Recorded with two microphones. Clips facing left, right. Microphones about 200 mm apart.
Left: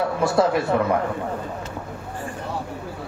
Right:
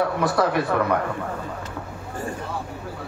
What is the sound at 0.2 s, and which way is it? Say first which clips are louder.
Speech: left 2 dB; 25° left (ahead or behind).